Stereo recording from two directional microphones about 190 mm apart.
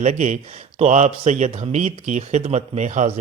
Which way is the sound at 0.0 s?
40° right (ahead or behind).